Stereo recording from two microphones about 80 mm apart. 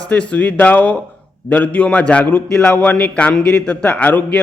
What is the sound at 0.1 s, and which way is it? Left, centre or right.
A man's voice, centre.